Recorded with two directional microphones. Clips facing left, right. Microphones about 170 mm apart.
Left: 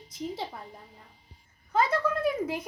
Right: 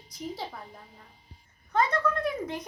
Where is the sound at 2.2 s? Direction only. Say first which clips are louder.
Left 3 dB; 5° left (ahead or behind).